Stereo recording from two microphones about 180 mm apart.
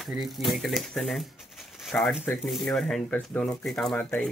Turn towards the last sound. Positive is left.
turn(degrees=10)  # may be behind; listen again after turning